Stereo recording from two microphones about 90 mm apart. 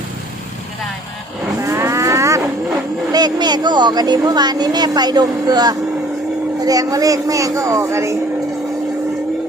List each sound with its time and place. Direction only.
1.6 s vehicle: 35° right (ahead or behind)
3.1 s speech: 50° right (ahead or behind); by 8.1 s 35° right (ahead or behind)